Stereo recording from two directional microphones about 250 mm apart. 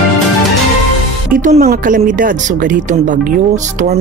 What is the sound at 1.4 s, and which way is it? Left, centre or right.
Speech, right.